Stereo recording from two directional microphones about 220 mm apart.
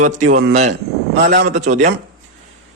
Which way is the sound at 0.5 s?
35° right (ahead or behind).